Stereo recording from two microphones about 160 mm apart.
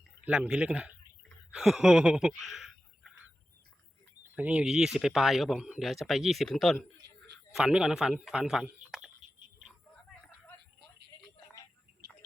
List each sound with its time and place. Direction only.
0.3 s speech: 5° right (ahead or behind)
4.4 s speech: 5° right (ahead or behind)